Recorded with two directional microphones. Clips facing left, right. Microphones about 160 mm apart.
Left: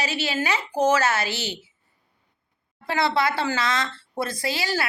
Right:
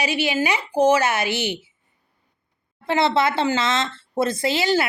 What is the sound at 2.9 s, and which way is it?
Speech, 25° right (ahead or behind).